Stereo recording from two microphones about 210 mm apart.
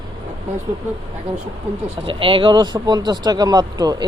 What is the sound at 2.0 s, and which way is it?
Speech, 25° right (ahead or behind).